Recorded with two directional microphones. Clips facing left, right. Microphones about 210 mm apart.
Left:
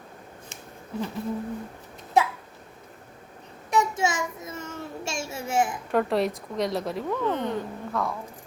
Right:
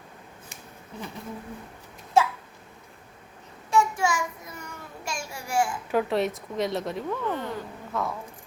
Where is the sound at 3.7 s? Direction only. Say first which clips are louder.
Right 1 dB; 20° left (ahead or behind).